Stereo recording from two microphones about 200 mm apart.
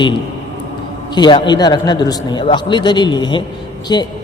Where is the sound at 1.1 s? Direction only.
20° left (ahead or behind).